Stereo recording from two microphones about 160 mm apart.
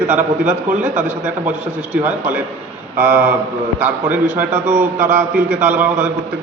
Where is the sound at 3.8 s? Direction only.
10° right (ahead or behind).